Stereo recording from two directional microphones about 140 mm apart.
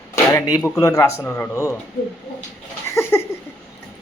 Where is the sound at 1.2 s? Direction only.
10° left (ahead or behind).